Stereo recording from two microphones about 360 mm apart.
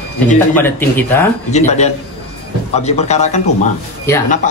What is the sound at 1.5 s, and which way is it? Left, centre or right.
Speech, centre.